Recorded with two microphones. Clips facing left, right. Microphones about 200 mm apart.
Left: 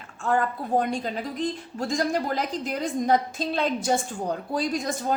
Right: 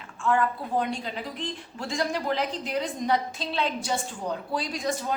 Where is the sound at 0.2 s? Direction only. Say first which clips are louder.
Even; 40° left (ahead or behind).